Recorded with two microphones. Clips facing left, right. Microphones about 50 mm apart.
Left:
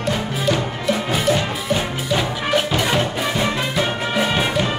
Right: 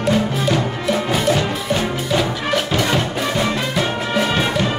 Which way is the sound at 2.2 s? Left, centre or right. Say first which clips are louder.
Even; centre.